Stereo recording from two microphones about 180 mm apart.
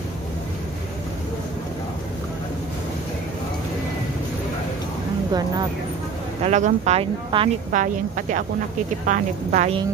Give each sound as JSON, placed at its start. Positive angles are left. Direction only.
{"t": 5.3, "sound": "speech", "side_deg": -20}
{"t": 6.4, "sound": "speech", "side_deg": -40}
{"t": 7.7, "sound": "a woman's voice", "side_deg": -45}